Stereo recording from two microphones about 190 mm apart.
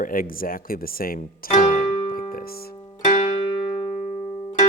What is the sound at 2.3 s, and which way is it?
Music, 50° left (ahead or behind).